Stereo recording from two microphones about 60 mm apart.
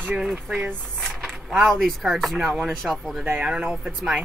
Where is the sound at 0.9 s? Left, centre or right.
Centre.